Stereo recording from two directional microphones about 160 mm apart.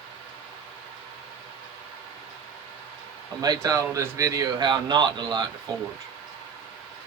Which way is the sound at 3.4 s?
25° right (ahead or behind).